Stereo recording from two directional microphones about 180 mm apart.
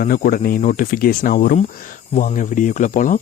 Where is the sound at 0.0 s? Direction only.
50° left (ahead or behind).